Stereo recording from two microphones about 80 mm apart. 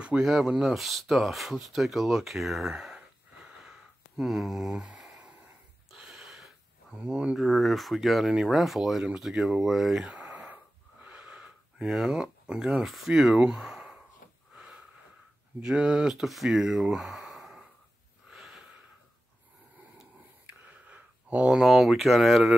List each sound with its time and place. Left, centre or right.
0.0 s speech: centre
4.2 s a sound: centre
7.1 s speech: centre
7.3 s speech: centre
10.1 s wheeze: centre
15.6 s speech: centre
18.3 s wheeze: centre
20.4 s a sound: centre
21.5 s speech: centre